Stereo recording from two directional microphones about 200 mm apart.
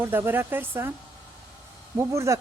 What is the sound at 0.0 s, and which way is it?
Speech, 10° right (ahead or behind).